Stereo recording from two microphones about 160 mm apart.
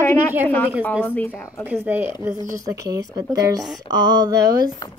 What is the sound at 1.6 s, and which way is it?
Speech, 10° right (ahead or behind).